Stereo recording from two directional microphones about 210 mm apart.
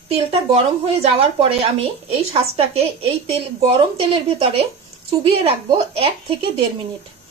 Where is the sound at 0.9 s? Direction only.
25° right (ahead or behind).